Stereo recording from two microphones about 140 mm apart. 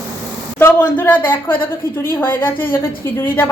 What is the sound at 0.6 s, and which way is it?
A woman's voice, 10° left (ahead or behind).